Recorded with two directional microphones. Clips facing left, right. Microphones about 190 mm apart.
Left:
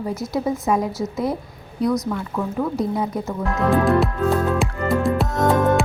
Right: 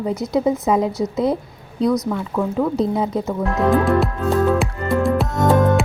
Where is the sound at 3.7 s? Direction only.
Centre (ahead or behind).